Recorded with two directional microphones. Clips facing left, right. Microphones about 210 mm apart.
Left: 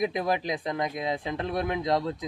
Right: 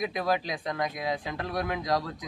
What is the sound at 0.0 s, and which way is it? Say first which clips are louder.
Speech: left 2 dB; 20° left (ahead or behind).